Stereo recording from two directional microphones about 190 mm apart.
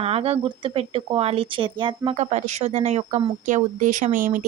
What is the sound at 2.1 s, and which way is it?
A woman's voice, 40° right (ahead or behind).